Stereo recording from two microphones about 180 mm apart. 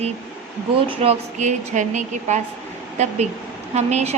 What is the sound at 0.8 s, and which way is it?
Speech, 40° right (ahead or behind).